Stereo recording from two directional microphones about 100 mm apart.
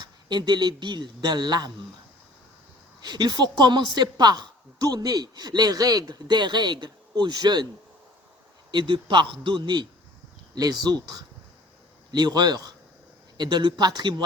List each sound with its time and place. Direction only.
0.0 s a woman's voice: 50° right (ahead or behind)
3.0 s a woman's voice: 45° right (ahead or behind)
8.7 s speech: 55° right (ahead or behind)
10.5 s a woman's voice: 40° right (ahead or behind)